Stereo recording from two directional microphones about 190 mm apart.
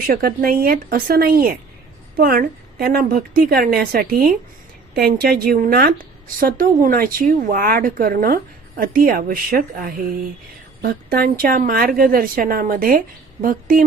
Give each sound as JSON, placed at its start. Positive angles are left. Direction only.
{"t": 0.1, "sound": "speech", "side_deg": -55}